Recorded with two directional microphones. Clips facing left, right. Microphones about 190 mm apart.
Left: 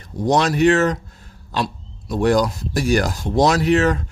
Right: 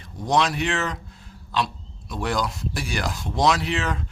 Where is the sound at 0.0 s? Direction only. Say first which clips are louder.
Left 4 dB; 45° left (ahead or behind).